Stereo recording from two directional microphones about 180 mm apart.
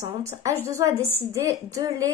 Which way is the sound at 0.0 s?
15° right (ahead or behind).